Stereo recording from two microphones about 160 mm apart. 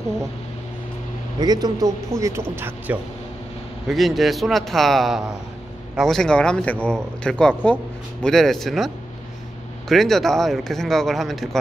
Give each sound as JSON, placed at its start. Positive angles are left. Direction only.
{"t": 1.4, "sound": "speech", "side_deg": -25}
{"t": 3.9, "sound": "speech", "side_deg": 0}